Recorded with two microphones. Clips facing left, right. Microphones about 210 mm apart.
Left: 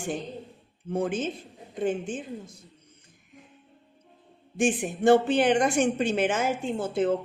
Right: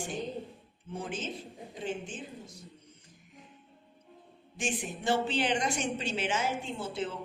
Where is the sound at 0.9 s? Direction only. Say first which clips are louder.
Left 9 dB; 50° left (ahead or behind).